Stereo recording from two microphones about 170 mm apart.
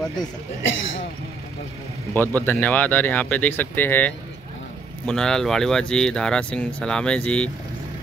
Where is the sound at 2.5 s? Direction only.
10° left (ahead or behind).